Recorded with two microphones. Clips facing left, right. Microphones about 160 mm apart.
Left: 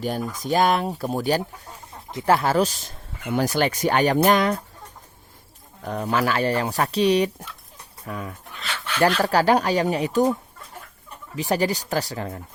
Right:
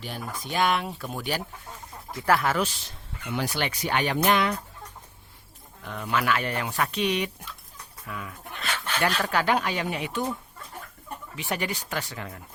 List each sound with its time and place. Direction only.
0.0 s speech: 45° left (ahead or behind)
2.0 s speech: 25° left (ahead or behind); by 4.5 s 40° left (ahead or behind)
5.8 s speech: 40° left (ahead or behind)
11.3 s speech: 35° left (ahead or behind)